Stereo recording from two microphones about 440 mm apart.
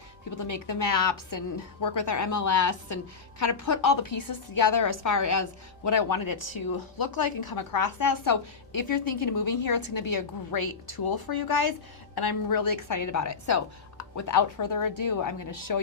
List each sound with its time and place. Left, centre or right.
0.3 s a woman's voice: left